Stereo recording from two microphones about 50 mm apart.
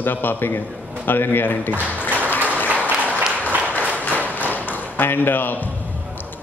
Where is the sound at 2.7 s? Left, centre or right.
Right.